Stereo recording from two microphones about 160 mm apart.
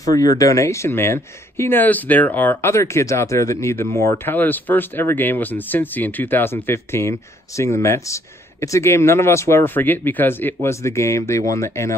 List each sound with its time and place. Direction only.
0.4 s speech: 20° left (ahead or behind)